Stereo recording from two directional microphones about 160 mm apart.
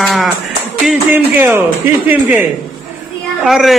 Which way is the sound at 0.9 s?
10° right (ahead or behind).